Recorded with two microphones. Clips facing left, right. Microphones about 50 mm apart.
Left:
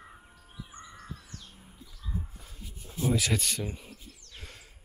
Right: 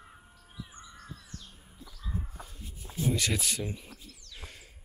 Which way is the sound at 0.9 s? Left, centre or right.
Centre.